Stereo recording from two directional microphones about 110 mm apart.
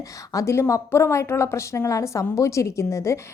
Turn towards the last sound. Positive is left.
turn(degrees=25)  # may be behind; listen again after turning